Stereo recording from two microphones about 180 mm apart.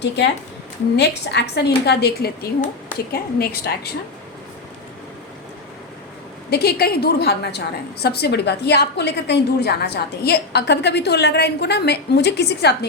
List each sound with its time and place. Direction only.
0.9 s a woman's voice: 70° left (ahead or behind)
6.5 s a woman's voice: 60° left (ahead or behind)